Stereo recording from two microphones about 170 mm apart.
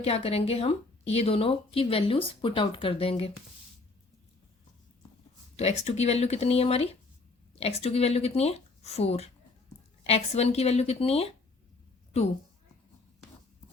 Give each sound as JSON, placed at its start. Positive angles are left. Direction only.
{"t": 0.0, "sound": "speech", "side_deg": 35}
{"t": 5.5, "sound": "speech", "side_deg": 40}